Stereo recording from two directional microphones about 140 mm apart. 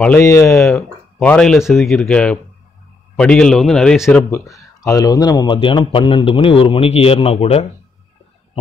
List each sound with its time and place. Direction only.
0.2 s speech: 20° left (ahead or behind)
0.5 s speech: 5° left (ahead or behind)
4.3 s speech: 25° left (ahead or behind); by 7.6 s 50° left (ahead or behind)